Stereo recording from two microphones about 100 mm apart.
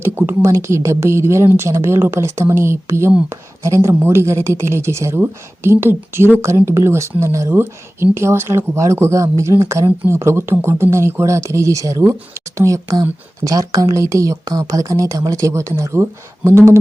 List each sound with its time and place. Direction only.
0.0 s speech: 25° right (ahead or behind)